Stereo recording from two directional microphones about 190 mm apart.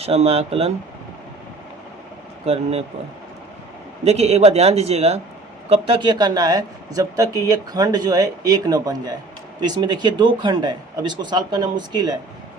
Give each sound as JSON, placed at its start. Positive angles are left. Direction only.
{"t": 0.0, "sound": "a man's voice", "side_deg": -35}
{"t": 2.5, "sound": "a man's voice", "side_deg": -35}
{"t": 4.0, "sound": "a man's voice", "side_deg": -35}